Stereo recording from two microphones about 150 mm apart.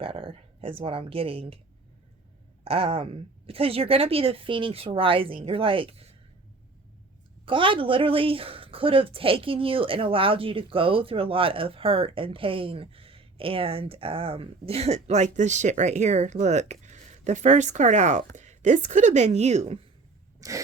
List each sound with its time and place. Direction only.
0.0 s speech: 35° right (ahead or behind)
2.6 s speech: 40° right (ahead or behind)
7.4 s speech: 35° right (ahead or behind)
20.4 s scrape: 20° right (ahead or behind)